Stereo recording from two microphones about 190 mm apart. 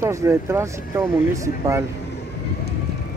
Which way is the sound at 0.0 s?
15° right (ahead or behind).